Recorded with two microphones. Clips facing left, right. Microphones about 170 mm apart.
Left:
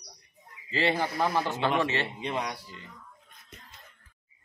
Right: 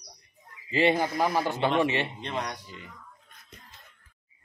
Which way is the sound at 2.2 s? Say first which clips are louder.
Left 1 dB; 10° left (ahead or behind).